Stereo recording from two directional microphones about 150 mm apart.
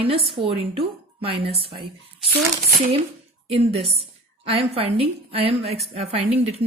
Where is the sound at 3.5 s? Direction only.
40° right (ahead or behind).